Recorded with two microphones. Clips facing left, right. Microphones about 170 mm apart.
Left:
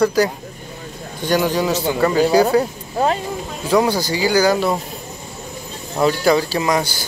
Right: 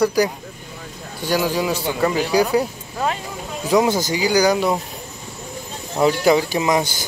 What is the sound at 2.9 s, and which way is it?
Snake, 35° left (ahead or behind).